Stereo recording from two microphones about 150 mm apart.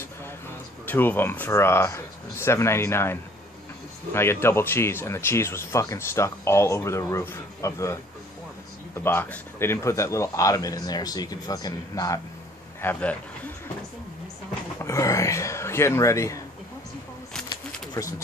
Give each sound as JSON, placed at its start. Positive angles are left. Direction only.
{"t": 0.8, "sound": "a man's voice", "side_deg": 15}
{"t": 14.8, "sound": "a man's voice", "side_deg": 20}
{"t": 17.5, "sound": "a sound", "side_deg": 20}